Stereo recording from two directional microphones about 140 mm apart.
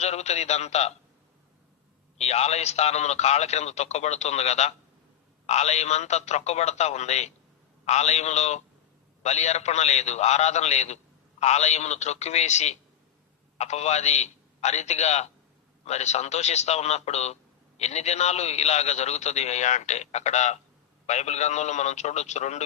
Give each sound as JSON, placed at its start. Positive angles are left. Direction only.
{"t": 0.0, "sound": "a man's voice", "side_deg": 50}
{"t": 2.1, "sound": "a man's voice", "side_deg": 50}